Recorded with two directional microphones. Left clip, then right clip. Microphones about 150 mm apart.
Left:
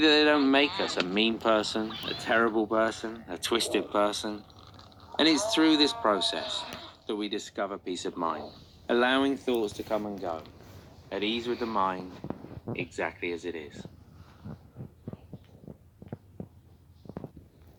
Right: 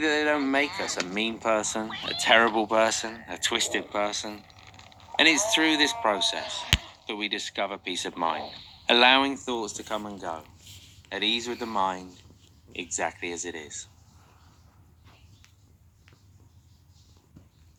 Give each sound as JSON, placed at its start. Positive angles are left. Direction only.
{"t": 0.0, "sound": "speech", "side_deg": 0}
{"t": 3.2, "sound": "speech", "side_deg": 0}
{"t": 4.8, "sound": "a sound", "side_deg": 5}
{"t": 5.6, "sound": "speech", "side_deg": 10}
{"t": 6.7, "sound": "basketball bounce", "side_deg": 5}
{"t": 7.5, "sound": "speech", "side_deg": -15}
{"t": 8.9, "sound": "speech", "side_deg": -25}
{"t": 10.0, "sound": "speech", "side_deg": -30}
{"t": 12.7, "sound": "speech", "side_deg": 35}
{"t": 13.0, "sound": "speech", "side_deg": -35}